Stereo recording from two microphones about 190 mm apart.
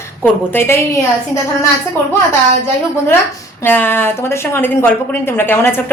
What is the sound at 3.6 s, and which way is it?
Speech, 10° left (ahead or behind).